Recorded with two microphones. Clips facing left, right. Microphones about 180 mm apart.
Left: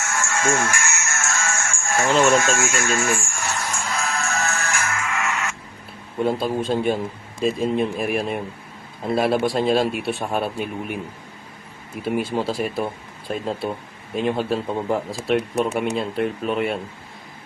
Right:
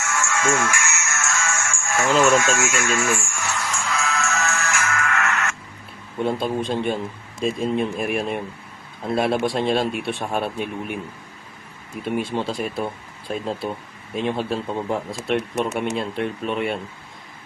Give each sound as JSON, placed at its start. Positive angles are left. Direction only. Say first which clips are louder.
{"t": 0.0, "sound": "music", "louder": "even", "side_deg": 35}
{"t": 5.0, "sound": "a sound", "louder": "right 2 dB", "side_deg": 10}
{"t": 6.2, "sound": "speech", "louder": "left 1 dB", "side_deg": 0}
{"t": 12.0, "sound": "speech", "louder": "left 2 dB", "side_deg": 5}